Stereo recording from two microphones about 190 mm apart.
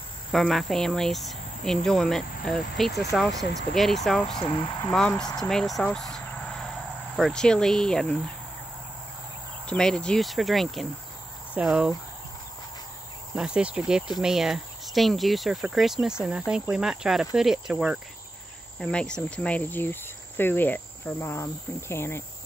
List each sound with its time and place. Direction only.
0.3 s speech: centre (ahead or behind)
4.4 s speech: 25° left (ahead or behind)
5.4 s speech: centre (ahead or behind)
9.7 s speech: 5° left (ahead or behind)
13.3 s speech: 5° right (ahead or behind); by 22.2 s 15° left (ahead or behind)